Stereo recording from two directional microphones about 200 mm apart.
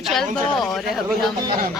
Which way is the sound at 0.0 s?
Centre (ahead or behind).